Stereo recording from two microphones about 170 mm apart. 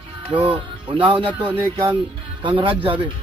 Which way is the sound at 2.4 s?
30° right (ahead or behind).